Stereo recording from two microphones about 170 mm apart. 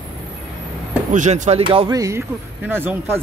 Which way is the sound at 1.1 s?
45° right (ahead or behind).